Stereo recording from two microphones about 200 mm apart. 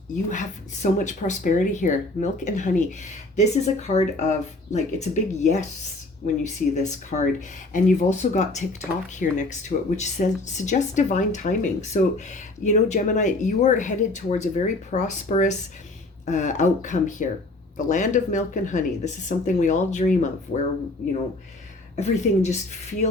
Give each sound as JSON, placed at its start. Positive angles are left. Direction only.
{"t": 0.3, "sound": "speech", "side_deg": 40}
{"t": 21.9, "sound": "speech", "side_deg": 35}